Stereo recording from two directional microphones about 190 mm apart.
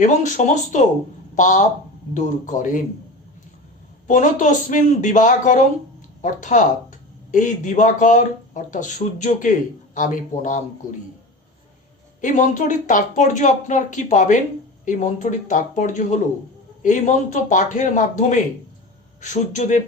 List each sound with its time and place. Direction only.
0.0 s speech: 40° left (ahead or behind)
4.0 s speech: 40° left (ahead or behind)
12.2 s speech: 40° left (ahead or behind)